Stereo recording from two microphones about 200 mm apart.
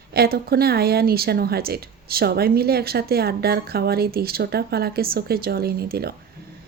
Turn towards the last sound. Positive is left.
turn(degrees=-50)  # may be behind; listen again after turning